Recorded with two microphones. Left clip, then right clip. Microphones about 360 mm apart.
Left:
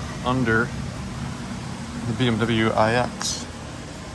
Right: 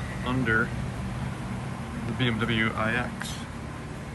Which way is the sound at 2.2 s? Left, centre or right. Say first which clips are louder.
Left 4 dB; centre.